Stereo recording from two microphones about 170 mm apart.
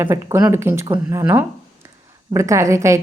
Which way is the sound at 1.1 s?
15° right (ahead or behind).